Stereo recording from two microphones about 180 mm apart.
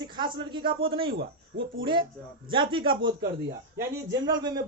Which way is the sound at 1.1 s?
90° right.